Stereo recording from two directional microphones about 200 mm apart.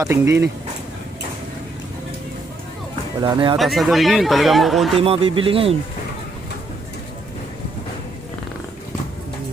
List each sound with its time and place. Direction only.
0.0 s speech: 15° right (ahead or behind)
3.2 s speech: 20° right (ahead or behind)
3.6 s speech: centre (ahead or behind)
4.9 s speech: 30° right (ahead or behind)